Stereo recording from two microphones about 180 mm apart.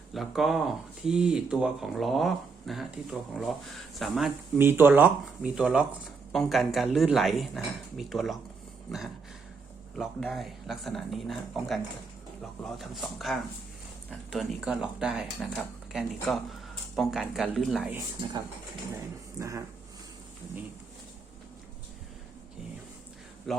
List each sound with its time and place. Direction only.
0.1 s speech: centre (ahead or behind)
4.5 s speech: 10° right (ahead or behind)
9.9 s speech: 5° left (ahead or behind)
19.4 s speech: 15° right (ahead or behind)
23.5 s speech: centre (ahead or behind)